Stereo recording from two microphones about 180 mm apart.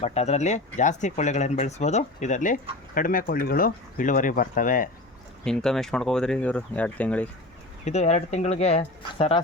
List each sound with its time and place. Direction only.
0.0 s speech: 35° left (ahead or behind)
5.5 s speech: 5° left (ahead or behind)
7.9 s speech: 40° left (ahead or behind)